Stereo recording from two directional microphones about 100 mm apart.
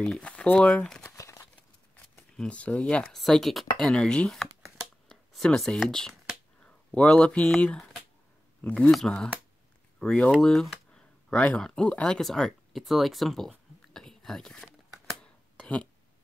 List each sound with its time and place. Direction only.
0.1 s speech: 10° left (ahead or behind)
1.0 s crumpling: 30° left (ahead or behind)
2.3 s speech: 10° left (ahead or behind)
10.4 s a sound: centre (ahead or behind)